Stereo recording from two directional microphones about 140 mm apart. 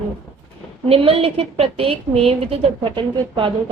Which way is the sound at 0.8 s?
45° right (ahead or behind).